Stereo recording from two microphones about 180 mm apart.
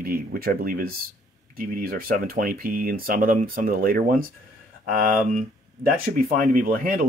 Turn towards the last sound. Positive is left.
turn(degrees=-50)  # may be behind; listen again after turning